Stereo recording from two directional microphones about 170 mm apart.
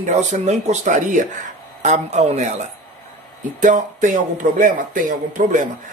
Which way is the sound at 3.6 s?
50° right (ahead or behind).